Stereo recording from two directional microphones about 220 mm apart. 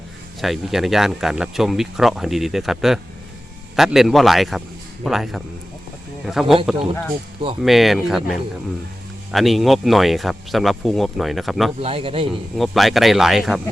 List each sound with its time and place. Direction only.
0.4 s speech: centre (ahead or behind)
11.8 s a man's voice: 25° right (ahead or behind)
12.5 s speech: centre (ahead or behind)